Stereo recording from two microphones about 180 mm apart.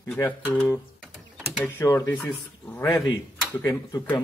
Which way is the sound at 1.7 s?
15° left (ahead or behind).